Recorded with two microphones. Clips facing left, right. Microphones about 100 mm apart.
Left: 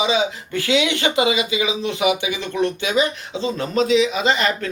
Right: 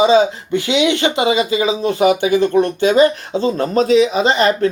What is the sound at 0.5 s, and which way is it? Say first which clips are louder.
Speech: right 4 dB; 20° right (ahead or behind).